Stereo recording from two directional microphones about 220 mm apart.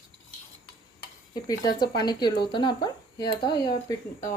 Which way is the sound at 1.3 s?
20° left (ahead or behind).